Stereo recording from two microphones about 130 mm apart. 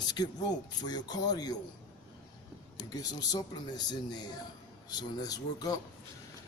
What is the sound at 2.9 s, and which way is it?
Music, 30° left (ahead or behind).